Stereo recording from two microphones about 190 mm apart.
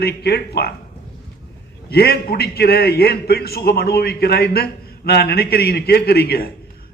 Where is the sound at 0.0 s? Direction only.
60° left (ahead or behind).